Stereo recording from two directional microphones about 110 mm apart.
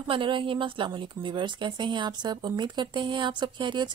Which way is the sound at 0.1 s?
50° right (ahead or behind).